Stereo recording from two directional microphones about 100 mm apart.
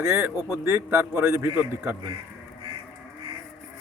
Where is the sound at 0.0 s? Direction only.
25° right (ahead or behind).